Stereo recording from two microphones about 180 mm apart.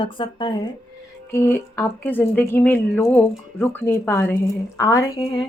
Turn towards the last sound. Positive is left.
turn(degrees=20)  # may be behind; listen again after turning